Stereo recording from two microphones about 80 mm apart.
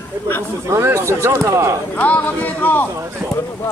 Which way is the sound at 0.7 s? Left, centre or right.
Right.